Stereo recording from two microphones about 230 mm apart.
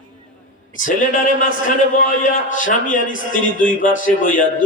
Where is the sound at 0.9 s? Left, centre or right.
Left.